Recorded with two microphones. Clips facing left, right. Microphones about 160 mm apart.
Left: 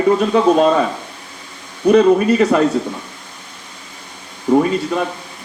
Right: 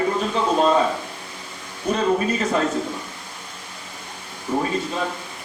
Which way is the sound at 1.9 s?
65° left (ahead or behind).